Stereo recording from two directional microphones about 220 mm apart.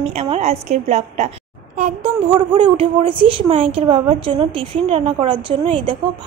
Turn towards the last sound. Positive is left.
turn(degrees=-25)  # may be behind; listen again after turning